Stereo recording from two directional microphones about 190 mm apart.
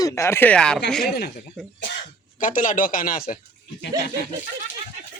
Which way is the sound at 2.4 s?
45° left (ahead or behind).